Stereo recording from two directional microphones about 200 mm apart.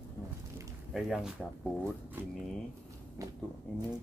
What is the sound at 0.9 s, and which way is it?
Speech, centre (ahead or behind).